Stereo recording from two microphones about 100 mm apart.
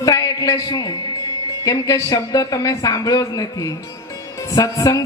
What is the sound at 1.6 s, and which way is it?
A man's voice, 35° left (ahead or behind).